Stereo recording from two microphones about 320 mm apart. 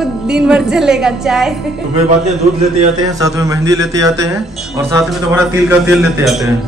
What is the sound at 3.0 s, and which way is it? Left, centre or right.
A man's voice, centre.